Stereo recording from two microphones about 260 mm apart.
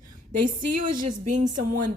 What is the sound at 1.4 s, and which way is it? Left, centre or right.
Speech, right.